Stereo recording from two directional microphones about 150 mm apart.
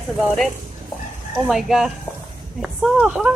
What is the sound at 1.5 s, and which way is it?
Speech, centre (ahead or behind).